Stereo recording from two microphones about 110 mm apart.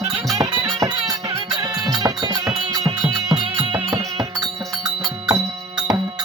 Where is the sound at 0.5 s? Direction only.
50° right (ahead or behind).